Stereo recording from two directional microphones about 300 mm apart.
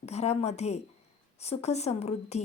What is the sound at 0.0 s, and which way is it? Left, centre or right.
A woman's voice, left.